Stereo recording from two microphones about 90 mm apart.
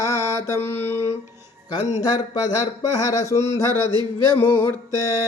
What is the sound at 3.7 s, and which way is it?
Music, 55° right (ahead or behind).